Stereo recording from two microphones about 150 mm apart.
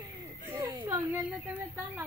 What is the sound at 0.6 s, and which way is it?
Speech, 15° right (ahead or behind).